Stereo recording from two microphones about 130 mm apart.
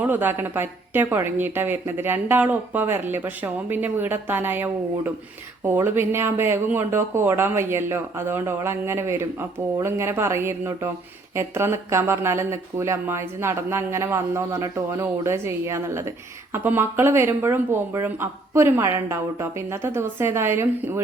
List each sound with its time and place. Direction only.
0.0 s a woman's voice: 15° right (ahead or behind)